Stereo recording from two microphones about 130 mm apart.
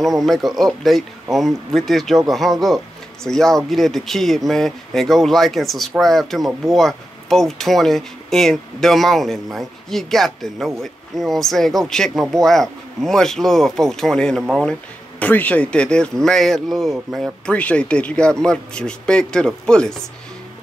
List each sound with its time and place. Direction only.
0.0 s speech: centre (ahead or behind)